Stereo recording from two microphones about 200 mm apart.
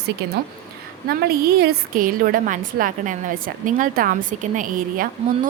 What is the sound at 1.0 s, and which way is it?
A woman's voice, 50° right (ahead or behind).